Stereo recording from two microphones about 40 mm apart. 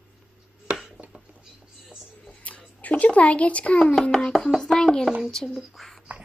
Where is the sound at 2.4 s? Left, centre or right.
Left.